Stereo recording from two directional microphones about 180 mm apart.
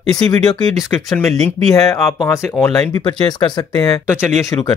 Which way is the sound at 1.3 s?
15° left (ahead or behind).